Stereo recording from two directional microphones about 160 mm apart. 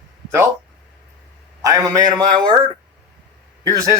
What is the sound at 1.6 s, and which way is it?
Speech, 20° right (ahead or behind).